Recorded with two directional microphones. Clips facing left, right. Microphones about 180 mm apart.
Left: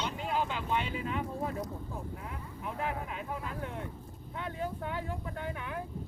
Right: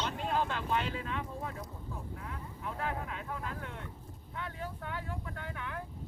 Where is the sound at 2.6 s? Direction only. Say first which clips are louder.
Left 2 dB; 15° left (ahead or behind).